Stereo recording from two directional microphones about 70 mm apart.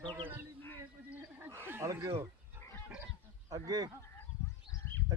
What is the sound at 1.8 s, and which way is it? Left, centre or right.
Speech, right.